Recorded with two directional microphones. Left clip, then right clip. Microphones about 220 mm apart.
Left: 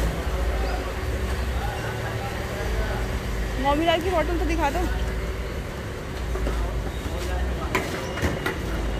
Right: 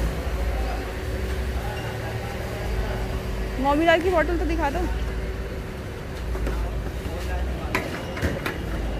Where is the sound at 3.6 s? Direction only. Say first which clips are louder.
Right 3 dB; 25° right (ahead or behind).